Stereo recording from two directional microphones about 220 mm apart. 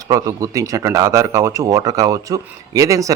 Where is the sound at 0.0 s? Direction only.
15° right (ahead or behind).